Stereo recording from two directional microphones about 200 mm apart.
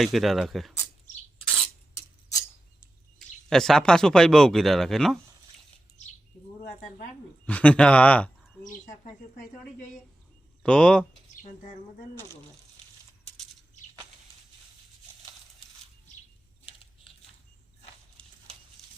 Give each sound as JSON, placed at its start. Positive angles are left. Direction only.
{"t": 0.0, "sound": "speech", "side_deg": 0}
{"t": 3.2, "sound": "speech", "side_deg": 0}
{"t": 6.0, "sound": "bird", "side_deg": 35}
{"t": 7.4, "sound": "speech", "side_deg": 5}
{"t": 10.6, "sound": "speech", "side_deg": 5}